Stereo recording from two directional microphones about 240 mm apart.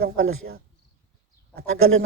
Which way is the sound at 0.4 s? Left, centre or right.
Right.